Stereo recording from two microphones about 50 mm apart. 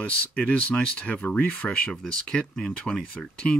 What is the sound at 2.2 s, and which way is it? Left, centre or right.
Speech, centre.